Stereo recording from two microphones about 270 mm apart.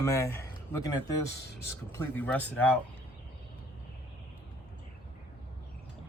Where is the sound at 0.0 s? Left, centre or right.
Centre.